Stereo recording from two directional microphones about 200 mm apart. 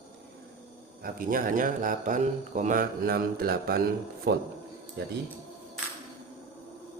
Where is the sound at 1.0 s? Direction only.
45° right (ahead or behind).